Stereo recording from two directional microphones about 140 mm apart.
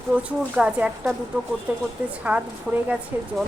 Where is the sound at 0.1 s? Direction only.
10° right (ahead or behind).